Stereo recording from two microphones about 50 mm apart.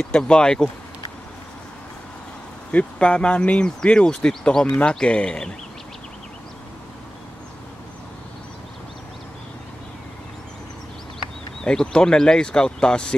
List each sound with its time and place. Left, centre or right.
0.0 s speech: centre
2.7 s speech: left
11.6 s speech: centre